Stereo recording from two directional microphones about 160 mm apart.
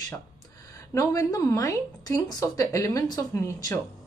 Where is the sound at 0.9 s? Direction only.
20° left (ahead or behind).